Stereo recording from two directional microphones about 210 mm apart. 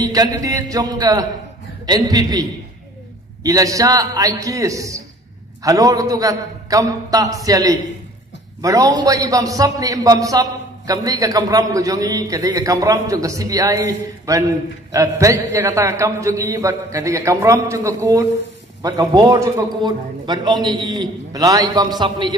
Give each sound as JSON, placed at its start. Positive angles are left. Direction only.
{"t": 0.0, "sound": "a man's voice", "side_deg": -20}
{"t": 3.4, "sound": "a man's voice", "side_deg": -15}